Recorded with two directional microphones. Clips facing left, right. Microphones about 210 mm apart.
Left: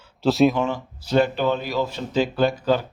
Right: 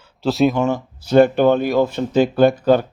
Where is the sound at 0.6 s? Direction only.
50° right (ahead or behind).